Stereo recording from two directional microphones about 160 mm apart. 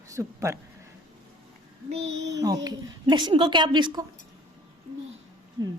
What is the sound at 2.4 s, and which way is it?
A woman's voice, 20° right (ahead or behind).